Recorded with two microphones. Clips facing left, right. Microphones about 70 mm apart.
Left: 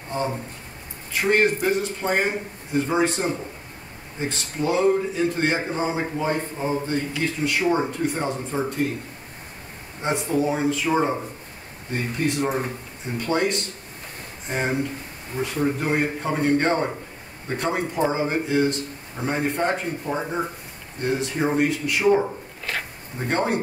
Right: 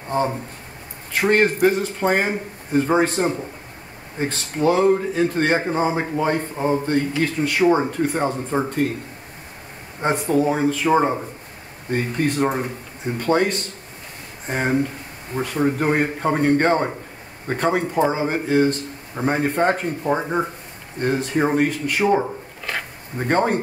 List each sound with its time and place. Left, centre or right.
1.1 s a man's voice: right
6.5 s speech: right
6.9 s a man's voice: right
10.0 s a man's voice: right
11.9 s a man's voice: right
23.1 s a man's voice: right